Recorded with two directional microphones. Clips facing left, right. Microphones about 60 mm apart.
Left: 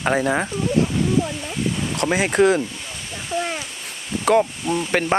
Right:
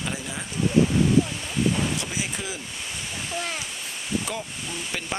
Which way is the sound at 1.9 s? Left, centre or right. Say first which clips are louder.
Left 11 dB; left.